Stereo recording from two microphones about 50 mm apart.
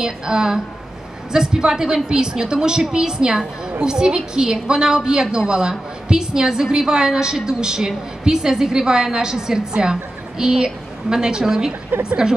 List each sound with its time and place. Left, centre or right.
0.0 s a woman's voice: centre
11.9 s a woman's voice: right